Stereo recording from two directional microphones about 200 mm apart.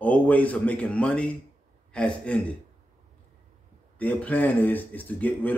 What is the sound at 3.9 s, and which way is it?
Speech, 10° left (ahead or behind).